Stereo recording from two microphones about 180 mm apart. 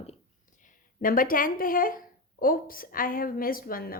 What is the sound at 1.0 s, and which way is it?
A woman's voice, 50° left (ahead or behind).